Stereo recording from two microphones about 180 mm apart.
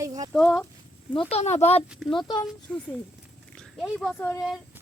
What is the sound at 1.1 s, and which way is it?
Speech, 35° left (ahead or behind).